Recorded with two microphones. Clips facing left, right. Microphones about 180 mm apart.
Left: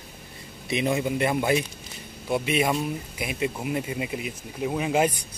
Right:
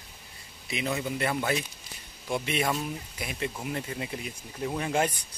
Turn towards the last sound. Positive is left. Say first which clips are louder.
# left 4 dB
turn(degrees=10)  # may be behind; listen again after turning